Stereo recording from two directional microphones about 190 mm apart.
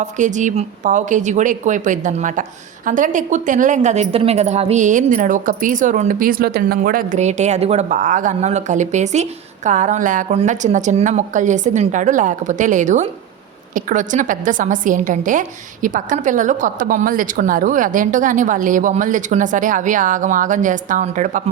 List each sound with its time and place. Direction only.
0.0 s a woman's voice: 40° right (ahead or behind)